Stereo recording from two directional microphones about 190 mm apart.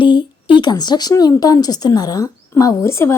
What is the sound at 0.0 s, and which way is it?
A woman's voice, 25° left (ahead or behind).